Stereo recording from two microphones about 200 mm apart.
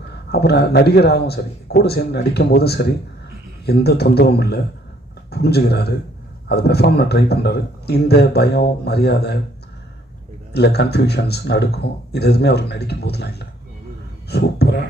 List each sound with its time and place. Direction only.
0.3 s a man's voice: 55° left (ahead or behind)
10.5 s a man's voice: 55° left (ahead or behind)